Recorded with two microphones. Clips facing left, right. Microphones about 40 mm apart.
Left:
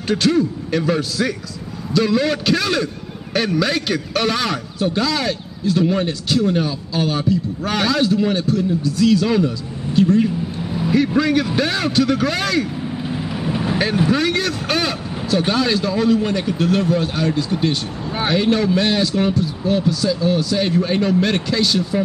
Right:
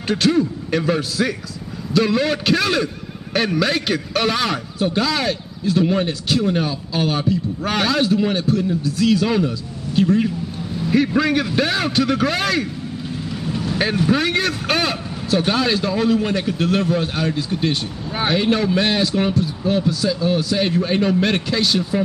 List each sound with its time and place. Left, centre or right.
0.0 s a man's voice: centre
13.4 s vehicle: left
14.1 s a man's voice: centre